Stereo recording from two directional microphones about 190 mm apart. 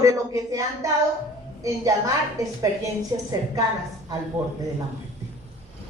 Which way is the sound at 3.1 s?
20° right (ahead or behind).